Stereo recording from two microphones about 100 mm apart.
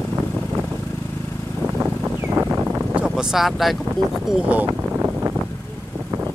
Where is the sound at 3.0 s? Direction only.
5° right (ahead or behind).